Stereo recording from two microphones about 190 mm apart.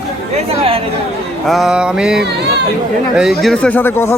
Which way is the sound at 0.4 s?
30° right (ahead or behind).